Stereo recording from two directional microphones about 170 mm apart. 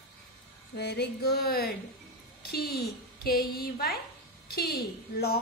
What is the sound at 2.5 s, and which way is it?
Music, 65° left (ahead or behind).